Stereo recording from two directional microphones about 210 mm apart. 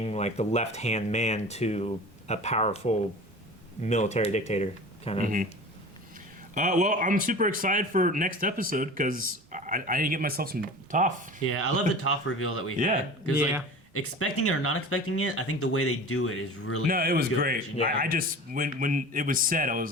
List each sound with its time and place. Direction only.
0.0 s speech: 30° left (ahead or behind)
6.5 s speech: 40° right (ahead or behind)
11.4 s speech: 90° left
12.7 s speech: 40° right (ahead or behind)
13.3 s speech: 10° right (ahead or behind)
13.9 s speech: 90° left
16.8 s speech: 45° right (ahead or behind)